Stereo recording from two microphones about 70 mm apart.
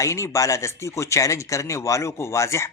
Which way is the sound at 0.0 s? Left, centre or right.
Left.